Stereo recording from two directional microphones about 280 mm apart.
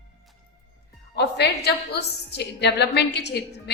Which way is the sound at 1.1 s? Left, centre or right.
Left.